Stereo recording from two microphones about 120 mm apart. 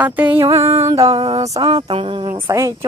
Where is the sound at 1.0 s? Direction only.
50° right (ahead or behind).